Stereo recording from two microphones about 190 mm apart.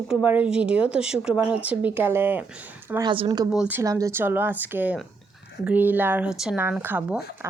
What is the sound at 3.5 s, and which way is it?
Speech, 10° right (ahead or behind).